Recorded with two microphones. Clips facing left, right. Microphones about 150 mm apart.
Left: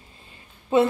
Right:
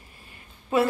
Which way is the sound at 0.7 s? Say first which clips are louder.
Left 4 dB; 25° left (ahead or behind).